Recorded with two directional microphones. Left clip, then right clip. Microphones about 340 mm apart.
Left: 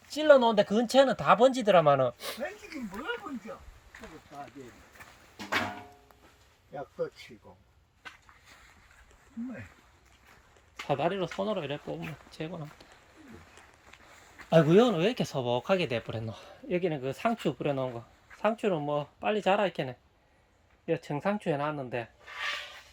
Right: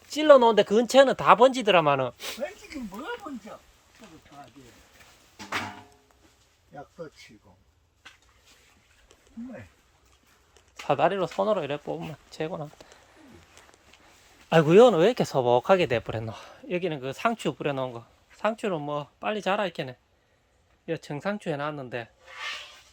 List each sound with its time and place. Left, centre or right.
0.1 s speech: centre
2.4 s a sound: right
7.0 s speech: left
10.8 s speech: centre
14.5 s speech: centre